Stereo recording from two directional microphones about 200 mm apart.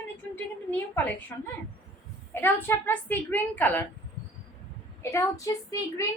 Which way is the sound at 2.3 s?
10° left (ahead or behind).